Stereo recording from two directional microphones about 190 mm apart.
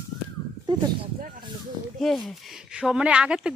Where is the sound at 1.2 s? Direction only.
45° right (ahead or behind).